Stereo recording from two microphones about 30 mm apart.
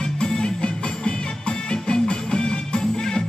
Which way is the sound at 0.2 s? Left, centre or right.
Left.